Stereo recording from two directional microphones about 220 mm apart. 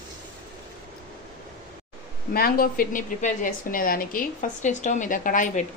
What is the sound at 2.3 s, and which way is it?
A woman's voice, 40° left (ahead or behind).